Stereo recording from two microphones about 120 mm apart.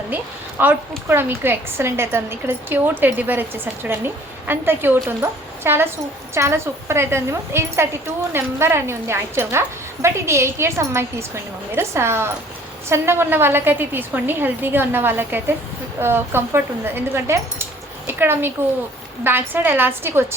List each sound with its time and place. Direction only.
0.6 s a woman's voice: 15° right (ahead or behind)